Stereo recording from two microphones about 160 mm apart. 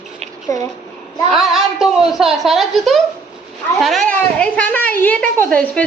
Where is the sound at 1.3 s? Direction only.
Centre (ahead or behind).